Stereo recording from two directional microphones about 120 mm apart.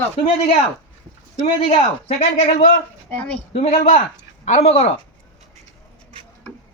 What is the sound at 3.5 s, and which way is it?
Speech, 65° left (ahead or behind).